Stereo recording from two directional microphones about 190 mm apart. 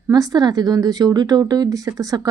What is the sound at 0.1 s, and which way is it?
Speech, 20° right (ahead or behind).